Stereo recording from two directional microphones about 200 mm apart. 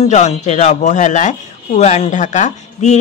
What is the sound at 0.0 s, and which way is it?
Speech, 35° left (ahead or behind).